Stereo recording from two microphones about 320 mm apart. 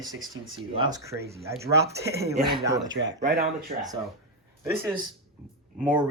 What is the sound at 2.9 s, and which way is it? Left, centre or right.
Speech, right.